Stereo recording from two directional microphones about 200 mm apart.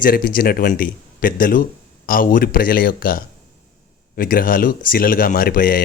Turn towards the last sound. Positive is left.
turn(degrees=45)  # may be behind; listen again after turning